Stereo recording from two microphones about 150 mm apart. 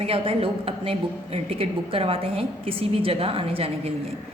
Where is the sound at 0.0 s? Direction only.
40° right (ahead or behind).